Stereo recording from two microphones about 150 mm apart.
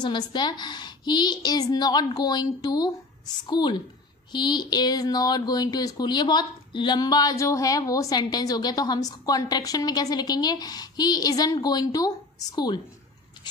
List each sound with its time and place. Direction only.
0.0 s speech: 30° left (ahead or behind)